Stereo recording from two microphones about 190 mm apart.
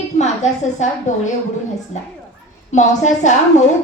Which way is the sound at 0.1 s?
40° left (ahead or behind).